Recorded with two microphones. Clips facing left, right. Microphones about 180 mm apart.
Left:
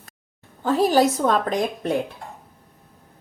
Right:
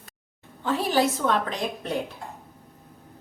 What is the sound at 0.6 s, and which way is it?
Speech, 40° left (ahead or behind).